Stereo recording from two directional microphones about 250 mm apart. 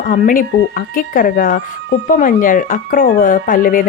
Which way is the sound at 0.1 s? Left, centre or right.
Left.